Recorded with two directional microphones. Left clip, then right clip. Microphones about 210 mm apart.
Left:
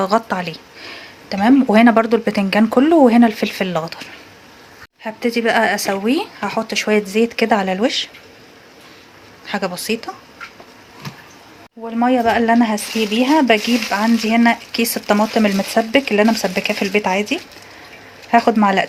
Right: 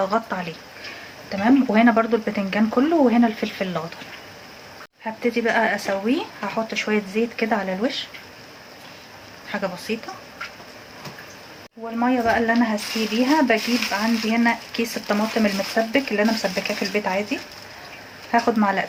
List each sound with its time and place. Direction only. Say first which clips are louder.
0.0 s speech: left 5 dB; 50° left (ahead or behind)
5.0 s speech: left 4 dB; 50° left (ahead or behind)
9.5 s speech: left 5 dB; 50° left (ahead or behind)
11.9 s speech: left 5 dB; 55° left (ahead or behind)